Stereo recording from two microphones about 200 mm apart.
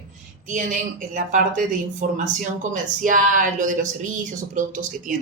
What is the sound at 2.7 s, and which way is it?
Speech, 40° right (ahead or behind).